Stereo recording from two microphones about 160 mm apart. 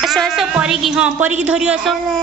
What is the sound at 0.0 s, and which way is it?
A woman's voice, centre (ahead or behind).